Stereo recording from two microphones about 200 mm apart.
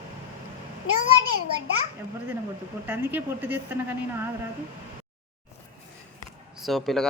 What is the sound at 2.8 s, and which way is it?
A woman's voice, 10° right (ahead or behind).